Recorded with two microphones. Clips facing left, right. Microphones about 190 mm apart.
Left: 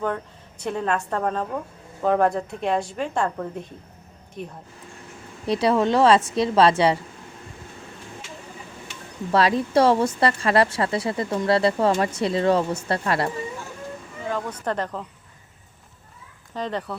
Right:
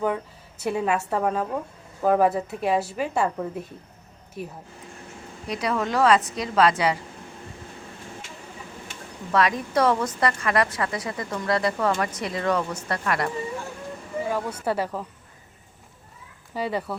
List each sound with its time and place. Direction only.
0.6 s a woman's voice: 10° right (ahead or behind)
5.5 s speech: 30° left (ahead or behind)
9.3 s speech: 30° left (ahead or behind)
14.3 s a woman's voice: 10° right (ahead or behind)
16.6 s a woman's voice: 10° right (ahead or behind)